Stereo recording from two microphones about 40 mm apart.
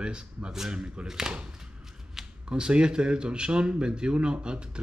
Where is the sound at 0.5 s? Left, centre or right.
Centre.